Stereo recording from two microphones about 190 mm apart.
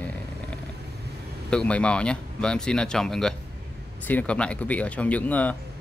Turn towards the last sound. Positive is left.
turn(degrees=10)  # may be behind; listen again after turning